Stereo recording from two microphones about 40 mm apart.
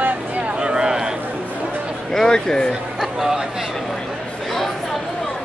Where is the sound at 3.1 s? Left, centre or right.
Centre.